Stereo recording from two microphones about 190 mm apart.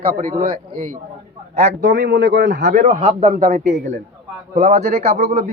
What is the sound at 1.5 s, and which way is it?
Speech, 35° right (ahead or behind).